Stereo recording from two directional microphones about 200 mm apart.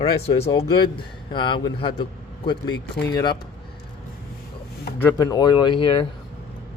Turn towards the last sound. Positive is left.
turn(degrees=25)  # may be behind; listen again after turning